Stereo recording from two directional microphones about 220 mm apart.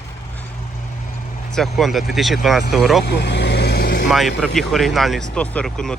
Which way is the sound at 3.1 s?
50° left (ahead or behind).